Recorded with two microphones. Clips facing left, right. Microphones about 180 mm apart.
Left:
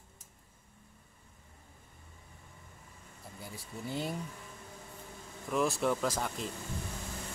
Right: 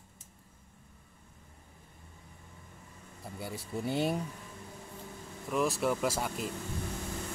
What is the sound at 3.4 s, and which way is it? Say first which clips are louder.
Speech: right 7 dB; 70° right (ahead or behind).